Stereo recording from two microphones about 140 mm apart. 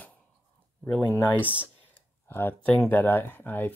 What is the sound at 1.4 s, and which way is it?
Speech, 10° right (ahead or behind).